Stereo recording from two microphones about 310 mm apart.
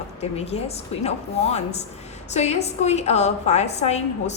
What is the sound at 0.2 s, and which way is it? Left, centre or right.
A woman's voice, centre.